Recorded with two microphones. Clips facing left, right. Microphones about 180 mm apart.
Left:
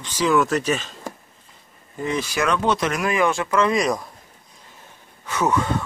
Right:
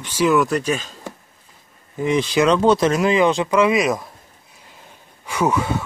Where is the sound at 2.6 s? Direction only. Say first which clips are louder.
Right 6 dB; 30° right (ahead or behind).